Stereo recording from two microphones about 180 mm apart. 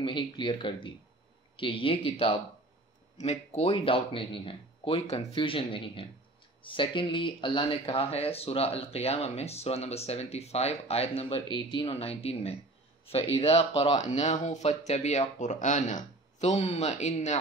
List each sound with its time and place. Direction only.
0.0 s speech: 25° left (ahead or behind)